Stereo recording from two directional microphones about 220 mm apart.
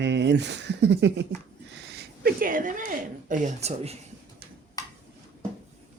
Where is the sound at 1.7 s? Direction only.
50° right (ahead or behind); by 3.9 s 30° right (ahead or behind).